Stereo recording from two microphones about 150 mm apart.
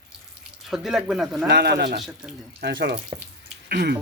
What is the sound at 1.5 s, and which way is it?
Speech, 90° right.